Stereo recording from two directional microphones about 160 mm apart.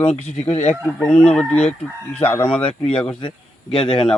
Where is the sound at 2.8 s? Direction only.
35° left (ahead or behind).